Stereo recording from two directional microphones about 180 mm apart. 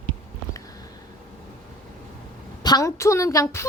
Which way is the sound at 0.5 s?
20° left (ahead or behind).